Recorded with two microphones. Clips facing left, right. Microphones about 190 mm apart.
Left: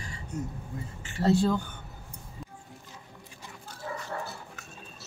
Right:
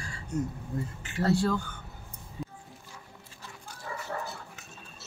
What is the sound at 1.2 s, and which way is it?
Speech, 20° left (ahead or behind).